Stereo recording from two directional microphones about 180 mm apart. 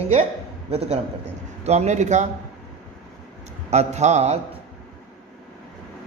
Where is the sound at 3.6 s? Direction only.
40° right (ahead or behind).